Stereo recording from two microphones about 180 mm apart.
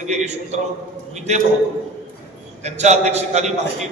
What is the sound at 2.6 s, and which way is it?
Speech, 40° right (ahead or behind).